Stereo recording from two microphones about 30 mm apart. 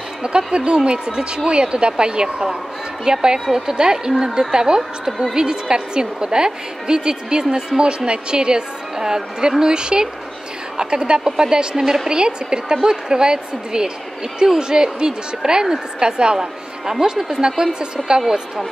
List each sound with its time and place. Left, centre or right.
0.5 s speech: right
3.1 s a woman's voice: right
3.7 s a woman's voice: right
17.0 s a woman's voice: centre